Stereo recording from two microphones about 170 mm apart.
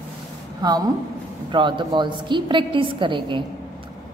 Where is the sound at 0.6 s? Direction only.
20° right (ahead or behind).